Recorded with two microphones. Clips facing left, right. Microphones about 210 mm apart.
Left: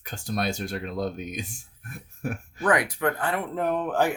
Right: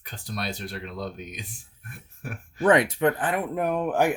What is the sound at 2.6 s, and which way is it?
Speech, 25° right (ahead or behind).